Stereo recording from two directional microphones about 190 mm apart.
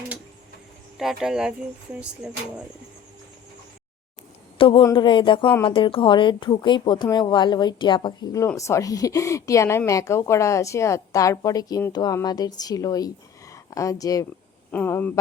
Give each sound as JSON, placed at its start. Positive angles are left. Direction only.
{"t": 0.9, "sound": "speech", "side_deg": 0}
{"t": 4.5, "sound": "a woman's voice", "side_deg": 25}